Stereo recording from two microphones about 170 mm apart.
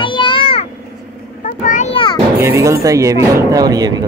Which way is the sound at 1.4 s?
50° left (ahead or behind).